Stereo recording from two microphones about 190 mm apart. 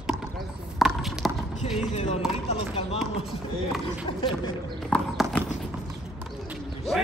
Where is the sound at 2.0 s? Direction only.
35° left (ahead or behind).